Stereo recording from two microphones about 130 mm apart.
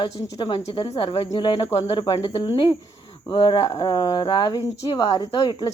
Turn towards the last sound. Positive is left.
turn(degrees=35)  # may be behind; listen again after turning